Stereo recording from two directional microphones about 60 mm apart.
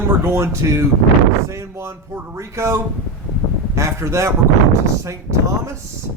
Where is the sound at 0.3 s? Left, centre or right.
Right.